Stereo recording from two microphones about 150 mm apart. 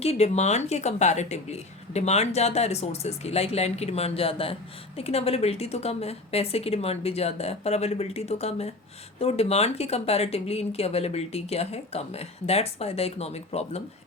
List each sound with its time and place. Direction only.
0.0 s speech: 45° left (ahead or behind)